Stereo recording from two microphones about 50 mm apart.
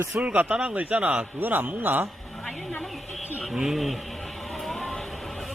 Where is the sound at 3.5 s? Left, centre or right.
Centre.